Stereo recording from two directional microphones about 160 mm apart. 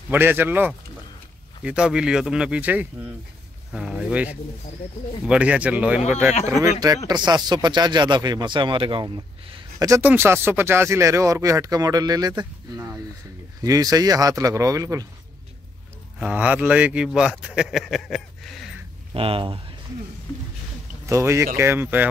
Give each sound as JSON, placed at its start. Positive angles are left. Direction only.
{"t": 0.1, "sound": "speech", "side_deg": -10}
{"t": 6.6, "sound": "speech", "side_deg": -25}
{"t": 9.8, "sound": "speech", "side_deg": -15}
{"t": 16.2, "sound": "speech", "side_deg": -10}
{"t": 19.1, "sound": "speech", "side_deg": -35}
{"t": 21.1, "sound": "speech", "side_deg": -20}